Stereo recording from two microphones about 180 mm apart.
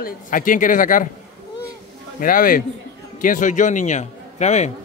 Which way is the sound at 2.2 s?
50° left (ahead or behind).